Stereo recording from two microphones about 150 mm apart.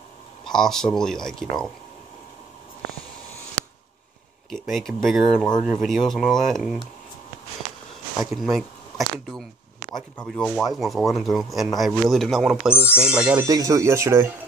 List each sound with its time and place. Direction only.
0.5 s speech: 5° left (ahead or behind)
4.5 s speech: centre (ahead or behind)
8.2 s speech: centre (ahead or behind)
13.4 s speech: 25° right (ahead or behind)